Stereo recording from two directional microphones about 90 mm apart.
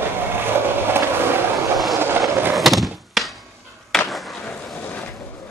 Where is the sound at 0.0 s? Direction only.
25° right (ahead or behind).